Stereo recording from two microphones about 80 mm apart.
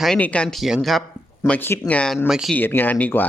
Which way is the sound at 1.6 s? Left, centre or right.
Left.